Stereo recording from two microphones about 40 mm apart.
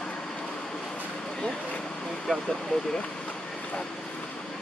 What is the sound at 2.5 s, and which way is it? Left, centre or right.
Vehicle, centre.